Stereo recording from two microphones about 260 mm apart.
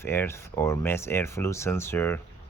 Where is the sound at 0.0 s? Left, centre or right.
Centre.